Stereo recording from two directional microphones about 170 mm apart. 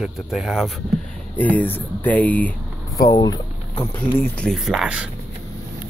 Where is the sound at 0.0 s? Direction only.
5° right (ahead or behind).